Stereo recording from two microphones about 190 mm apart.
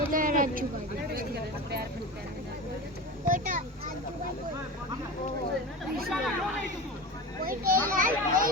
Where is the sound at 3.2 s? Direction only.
45° right (ahead or behind).